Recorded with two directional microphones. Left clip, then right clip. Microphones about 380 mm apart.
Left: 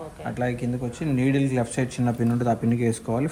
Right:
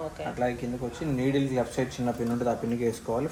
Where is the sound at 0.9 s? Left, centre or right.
Left.